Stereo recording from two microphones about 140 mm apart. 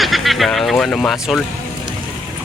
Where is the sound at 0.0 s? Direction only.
Centre (ahead or behind).